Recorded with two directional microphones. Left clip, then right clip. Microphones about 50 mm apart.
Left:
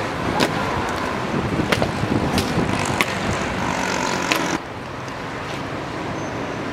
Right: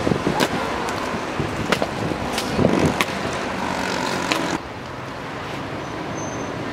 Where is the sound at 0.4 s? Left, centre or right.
Right.